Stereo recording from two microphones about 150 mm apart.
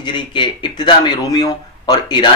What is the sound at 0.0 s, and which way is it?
Speech, 30° left (ahead or behind).